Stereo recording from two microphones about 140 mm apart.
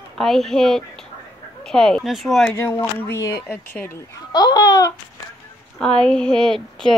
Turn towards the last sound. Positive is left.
turn(degrees=5)  # may be behind; listen again after turning